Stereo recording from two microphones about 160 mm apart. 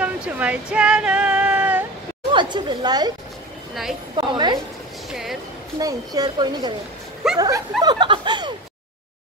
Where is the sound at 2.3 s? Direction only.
30° right (ahead or behind).